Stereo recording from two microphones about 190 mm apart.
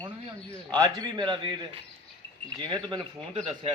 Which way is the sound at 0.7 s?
20° right (ahead or behind).